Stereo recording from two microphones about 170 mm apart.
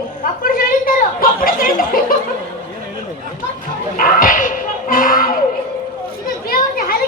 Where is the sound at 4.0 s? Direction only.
55° left (ahead or behind).